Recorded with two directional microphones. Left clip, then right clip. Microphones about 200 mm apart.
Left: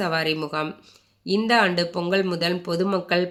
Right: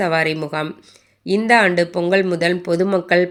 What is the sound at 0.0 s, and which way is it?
Speech, 20° right (ahead or behind).